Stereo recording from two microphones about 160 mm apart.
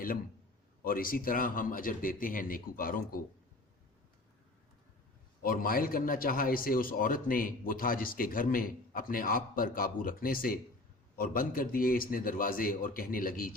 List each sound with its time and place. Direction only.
0.9 s a man's voice: 65° left (ahead or behind)
5.4 s a man's voice: 65° left (ahead or behind)